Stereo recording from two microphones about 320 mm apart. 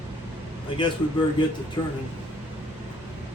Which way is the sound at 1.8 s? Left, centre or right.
Centre.